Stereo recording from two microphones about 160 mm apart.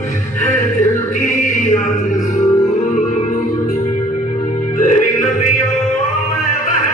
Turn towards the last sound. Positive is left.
turn(degrees=55)  # may be behind; listen again after turning